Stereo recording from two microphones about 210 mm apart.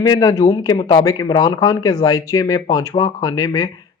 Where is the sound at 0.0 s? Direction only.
15° left (ahead or behind).